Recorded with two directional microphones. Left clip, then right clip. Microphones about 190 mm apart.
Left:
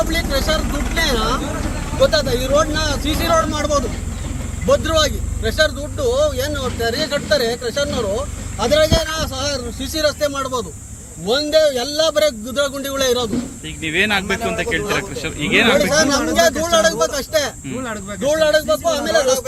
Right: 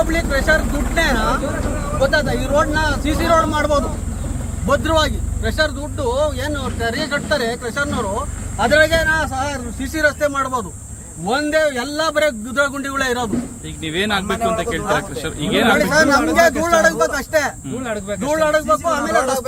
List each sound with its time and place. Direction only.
0.1 s a man's voice: centre (ahead or behind)
17.8 s speech: 30° right (ahead or behind)
18.3 s speech: centre (ahead or behind)